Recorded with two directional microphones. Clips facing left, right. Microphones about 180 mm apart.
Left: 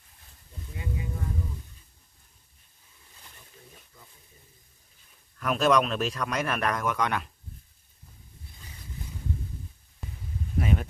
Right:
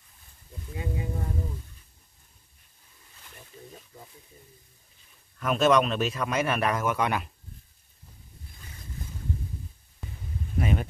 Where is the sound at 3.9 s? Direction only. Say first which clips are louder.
Right 7 dB; 35° right (ahead or behind).